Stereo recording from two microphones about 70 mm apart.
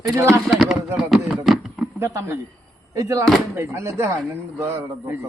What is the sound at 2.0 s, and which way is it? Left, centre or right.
Speech, right.